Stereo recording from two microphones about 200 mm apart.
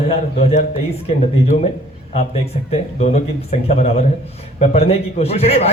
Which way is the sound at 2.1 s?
30° left (ahead or behind).